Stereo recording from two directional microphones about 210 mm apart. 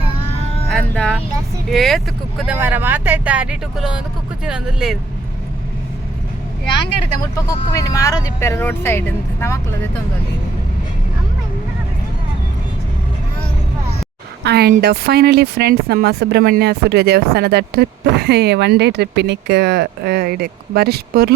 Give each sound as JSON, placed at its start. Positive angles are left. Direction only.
{"t": 0.7, "sound": "a sound", "side_deg": 5}
{"t": 1.7, "sound": "speech", "side_deg": 0}
{"t": 7.3, "sound": "speech", "side_deg": 15}
{"t": 14.4, "sound": "speech", "side_deg": -50}